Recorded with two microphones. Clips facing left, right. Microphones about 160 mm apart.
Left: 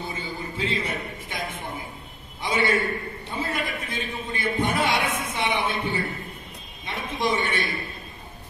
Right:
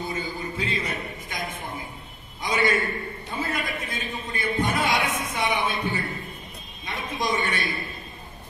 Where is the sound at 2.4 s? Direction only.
30° left (ahead or behind).